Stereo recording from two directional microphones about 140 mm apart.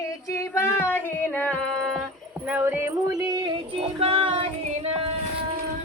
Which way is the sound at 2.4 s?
10° right (ahead or behind).